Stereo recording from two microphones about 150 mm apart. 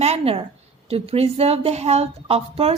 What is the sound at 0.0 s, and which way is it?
A woman's voice, 40° right (ahead or behind).